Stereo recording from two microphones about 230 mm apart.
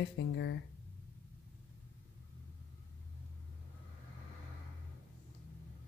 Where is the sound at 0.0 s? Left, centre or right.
Left.